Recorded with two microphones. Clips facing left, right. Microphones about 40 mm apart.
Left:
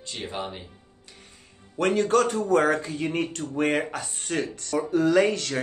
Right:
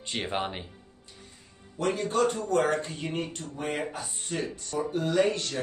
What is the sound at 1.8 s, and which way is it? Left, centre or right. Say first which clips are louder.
Speech: left 6 dB; left.